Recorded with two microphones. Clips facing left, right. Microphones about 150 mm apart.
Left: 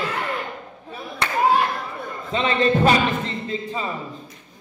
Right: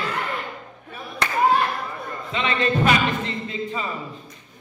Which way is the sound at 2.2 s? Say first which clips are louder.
Left 4 dB; 35° left (ahead or behind).